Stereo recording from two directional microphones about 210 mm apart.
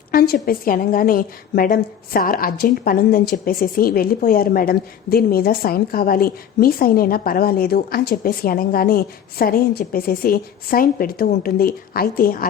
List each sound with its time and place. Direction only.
0.1 s a woman's voice: 45° left (ahead or behind)